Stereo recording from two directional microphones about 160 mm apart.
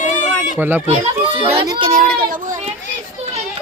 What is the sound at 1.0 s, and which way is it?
Speech, 35° right (ahead or behind).